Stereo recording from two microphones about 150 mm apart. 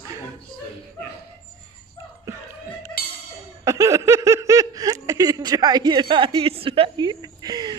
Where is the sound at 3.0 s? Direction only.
90° left.